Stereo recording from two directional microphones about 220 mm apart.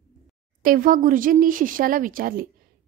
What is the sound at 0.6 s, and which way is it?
Speech, 40° right (ahead or behind).